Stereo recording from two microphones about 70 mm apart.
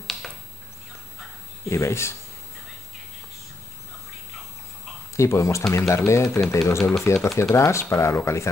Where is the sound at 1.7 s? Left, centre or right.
Left.